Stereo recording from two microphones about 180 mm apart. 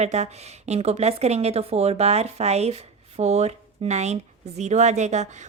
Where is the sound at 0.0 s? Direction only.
40° right (ahead or behind).